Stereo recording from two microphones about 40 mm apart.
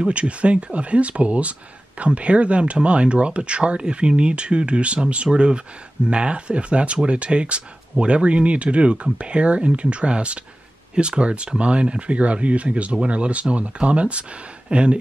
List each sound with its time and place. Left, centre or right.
0.0 s speech: right